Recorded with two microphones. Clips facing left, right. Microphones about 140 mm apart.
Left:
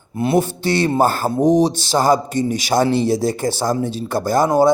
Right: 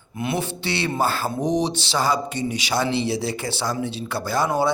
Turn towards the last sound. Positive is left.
turn(degrees=45)  # may be behind; listen again after turning